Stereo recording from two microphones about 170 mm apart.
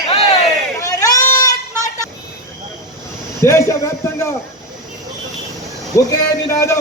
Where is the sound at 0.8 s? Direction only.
20° left (ahead or behind).